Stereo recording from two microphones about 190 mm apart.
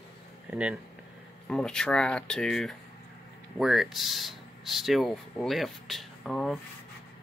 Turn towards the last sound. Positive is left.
turn(degrees=0)  # may be behind; listen again after turning